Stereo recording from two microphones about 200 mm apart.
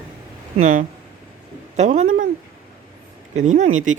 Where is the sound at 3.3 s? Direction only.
35° right (ahead or behind).